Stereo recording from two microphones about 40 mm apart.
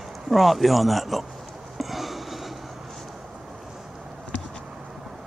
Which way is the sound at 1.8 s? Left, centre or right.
Centre.